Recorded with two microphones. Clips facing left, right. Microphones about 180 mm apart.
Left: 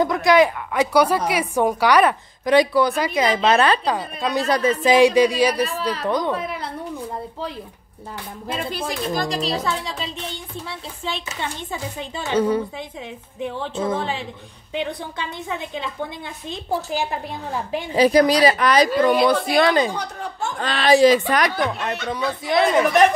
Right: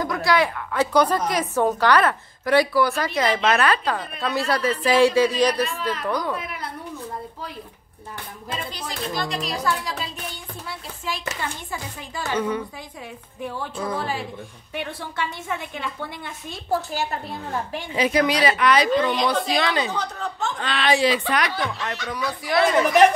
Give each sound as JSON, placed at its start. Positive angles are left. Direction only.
{"t": 0.0, "sound": "a woman's voice", "side_deg": 20}
{"t": 3.4, "sound": "a woman's voice", "side_deg": 25}
{"t": 5.7, "sound": "speech", "side_deg": 35}
{"t": 6.0, "sound": "a woman's voice", "side_deg": 25}
{"t": 8.5, "sound": "a woman's voice", "side_deg": 55}
{"t": 17.9, "sound": "a woman's voice", "side_deg": 35}
{"t": 19.9, "sound": "a woman's voice", "side_deg": 10}
{"t": 20.6, "sound": "a woman's voice", "side_deg": 40}
{"t": 22.1, "sound": "a woman's voice", "side_deg": 20}